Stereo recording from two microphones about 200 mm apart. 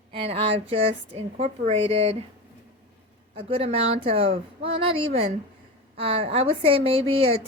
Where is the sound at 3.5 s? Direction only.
30° right (ahead or behind).